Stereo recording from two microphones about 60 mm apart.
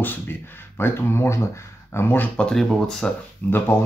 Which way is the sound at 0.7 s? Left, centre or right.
Left.